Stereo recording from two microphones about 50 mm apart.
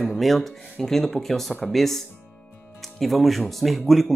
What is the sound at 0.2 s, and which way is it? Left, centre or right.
Speech, centre.